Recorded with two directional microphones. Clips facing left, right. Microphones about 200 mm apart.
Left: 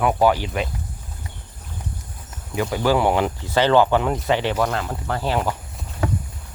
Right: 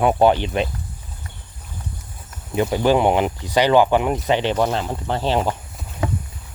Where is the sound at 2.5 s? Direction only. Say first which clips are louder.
Right 3 dB; 25° right (ahead or behind).